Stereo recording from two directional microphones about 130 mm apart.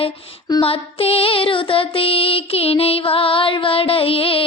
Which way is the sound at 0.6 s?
45° left (ahead or behind).